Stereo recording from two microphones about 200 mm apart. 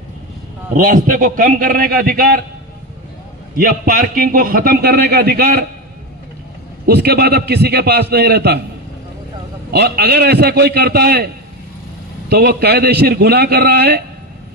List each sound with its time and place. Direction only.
0.7 s a man's voice: 40° right (ahead or behind)
3.5 s a man's voice: 45° right (ahead or behind)
6.9 s a man's voice: 55° right (ahead or behind)
9.7 s a man's voice: 50° right (ahead or behind)
12.3 s a man's voice: 50° right (ahead or behind)